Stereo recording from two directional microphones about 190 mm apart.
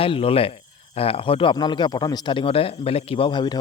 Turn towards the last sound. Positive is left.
turn(degrees=25)  # may be behind; listen again after turning